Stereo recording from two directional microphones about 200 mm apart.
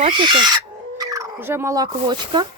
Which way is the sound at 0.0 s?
25° right (ahead or behind).